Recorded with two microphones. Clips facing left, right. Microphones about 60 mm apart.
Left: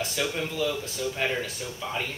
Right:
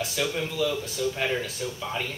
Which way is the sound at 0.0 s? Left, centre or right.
Centre.